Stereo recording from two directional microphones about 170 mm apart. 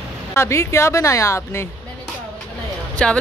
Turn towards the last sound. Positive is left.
turn(degrees=5)  # may be behind; listen again after turning